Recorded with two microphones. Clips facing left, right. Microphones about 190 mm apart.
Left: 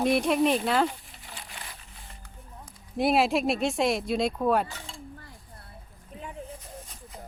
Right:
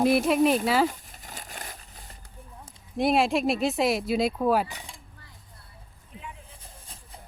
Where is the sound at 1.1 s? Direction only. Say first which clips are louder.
Right 2 dB; 45° right (ahead or behind).